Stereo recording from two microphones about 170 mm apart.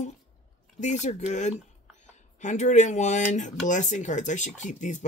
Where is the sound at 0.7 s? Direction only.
45° left (ahead or behind).